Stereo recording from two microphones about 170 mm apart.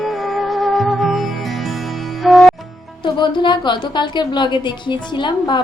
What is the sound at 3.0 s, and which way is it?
A woman's voice, 25° left (ahead or behind).